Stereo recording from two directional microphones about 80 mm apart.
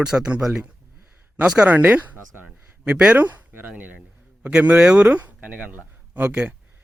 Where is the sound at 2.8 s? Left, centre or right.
Centre.